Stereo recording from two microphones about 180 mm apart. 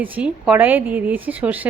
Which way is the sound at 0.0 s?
10° right (ahead or behind).